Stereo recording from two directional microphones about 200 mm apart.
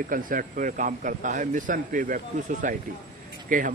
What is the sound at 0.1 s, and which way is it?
A man's voice, 45° right (ahead or behind).